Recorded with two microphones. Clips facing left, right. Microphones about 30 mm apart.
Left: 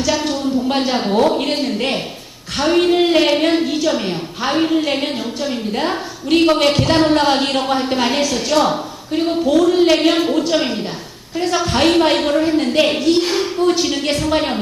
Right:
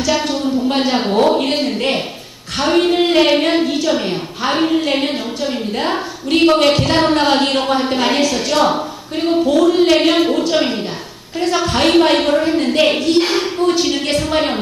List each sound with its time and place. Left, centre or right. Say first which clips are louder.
0.4 s a sound: right 1 dB; centre
0.9 s a woman's voice: right 2 dB; centre
13.1 s speech: right 2 dB; centre
13.6 s a woman's voice: even; centre